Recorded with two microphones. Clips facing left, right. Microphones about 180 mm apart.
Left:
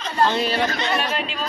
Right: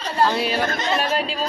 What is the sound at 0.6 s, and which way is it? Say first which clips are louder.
Speech: left 1 dB; 50° right (ahead or behind).